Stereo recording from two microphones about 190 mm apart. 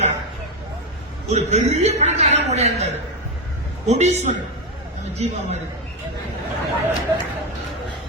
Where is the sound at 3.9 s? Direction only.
35° right (ahead or behind).